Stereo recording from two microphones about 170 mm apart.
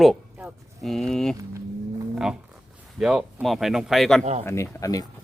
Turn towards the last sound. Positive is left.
turn(degrees=20)  # may be behind; listen again after turning